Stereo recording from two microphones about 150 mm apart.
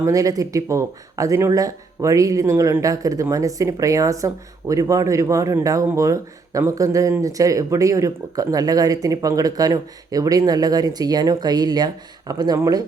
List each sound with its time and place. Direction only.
0.0 s speech: 20° right (ahead or behind)